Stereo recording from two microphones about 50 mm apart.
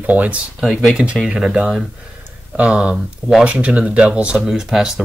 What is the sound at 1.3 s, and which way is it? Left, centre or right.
Speech, centre.